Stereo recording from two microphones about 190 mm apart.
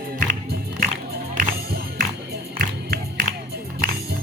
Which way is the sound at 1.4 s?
50° right (ahead or behind).